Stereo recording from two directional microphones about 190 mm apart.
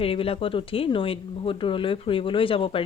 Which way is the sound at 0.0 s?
30° left (ahead or behind).